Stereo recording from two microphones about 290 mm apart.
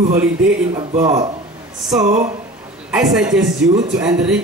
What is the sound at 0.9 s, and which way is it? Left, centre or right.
Speech, right.